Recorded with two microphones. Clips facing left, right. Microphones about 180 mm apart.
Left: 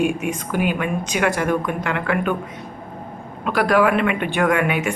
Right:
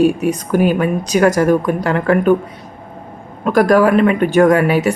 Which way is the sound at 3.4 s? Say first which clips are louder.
Right 6 dB; 45° right (ahead or behind).